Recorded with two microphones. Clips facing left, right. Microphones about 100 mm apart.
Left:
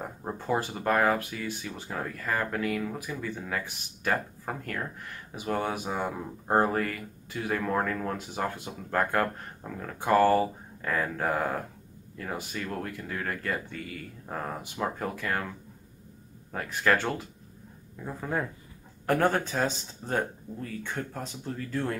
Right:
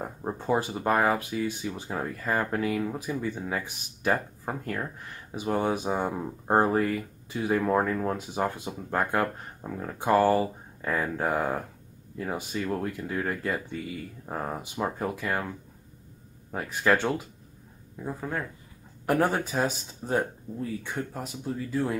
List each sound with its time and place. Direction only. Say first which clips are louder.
0.0 s speech: right 3 dB; 10° right (ahead or behind)
16.5 s speech: right 1 dB; 15° right (ahead or behind)
19.0 s speech: even; 10° right (ahead or behind)